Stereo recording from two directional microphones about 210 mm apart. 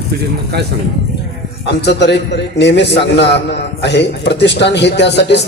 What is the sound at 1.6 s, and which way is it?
A man's voice, 50° left (ahead or behind).